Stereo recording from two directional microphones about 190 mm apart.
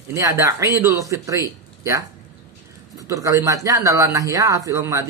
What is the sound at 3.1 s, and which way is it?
Speech, 15° right (ahead or behind).